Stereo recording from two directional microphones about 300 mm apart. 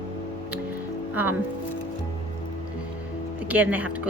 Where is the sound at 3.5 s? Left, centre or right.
Centre.